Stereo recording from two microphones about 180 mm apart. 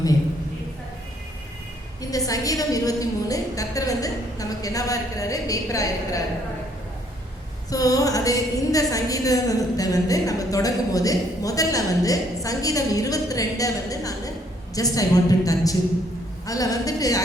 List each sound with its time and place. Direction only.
2.0 s a woman's voice: 20° left (ahead or behind)
7.7 s a woman's voice: 20° left (ahead or behind)